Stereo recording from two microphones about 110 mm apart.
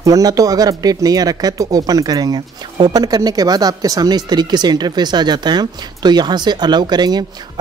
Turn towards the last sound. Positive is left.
turn(degrees=-40)  # may be behind; listen again after turning